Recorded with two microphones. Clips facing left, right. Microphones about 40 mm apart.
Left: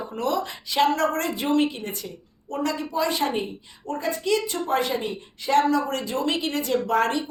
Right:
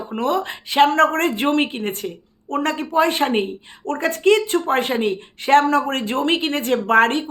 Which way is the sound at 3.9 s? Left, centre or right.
Right.